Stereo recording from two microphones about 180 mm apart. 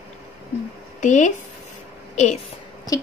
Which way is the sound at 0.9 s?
45° left (ahead or behind).